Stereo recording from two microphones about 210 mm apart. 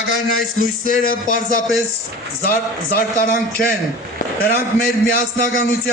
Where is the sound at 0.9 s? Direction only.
40° left (ahead or behind).